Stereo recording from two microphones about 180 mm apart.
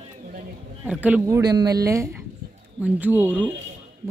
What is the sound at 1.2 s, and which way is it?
A man's voice, 20° right (ahead or behind).